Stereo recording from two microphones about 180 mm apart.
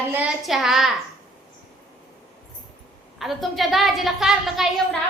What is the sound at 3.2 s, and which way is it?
A woman's voice, centre (ahead or behind).